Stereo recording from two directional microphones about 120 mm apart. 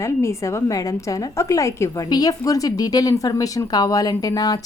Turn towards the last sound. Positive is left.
turn(degrees=30)  # may be behind; listen again after turning